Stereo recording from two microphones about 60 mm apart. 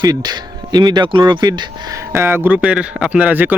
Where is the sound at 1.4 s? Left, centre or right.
Right.